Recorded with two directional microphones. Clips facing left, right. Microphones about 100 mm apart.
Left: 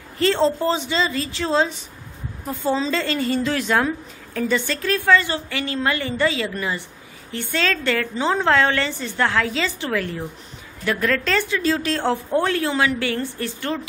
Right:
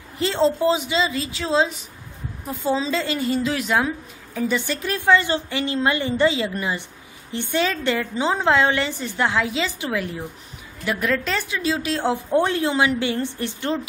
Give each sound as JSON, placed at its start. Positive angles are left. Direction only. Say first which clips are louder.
{"t": 0.2, "sound": "a woman's voice", "louder": "left 1 dB", "side_deg": -10}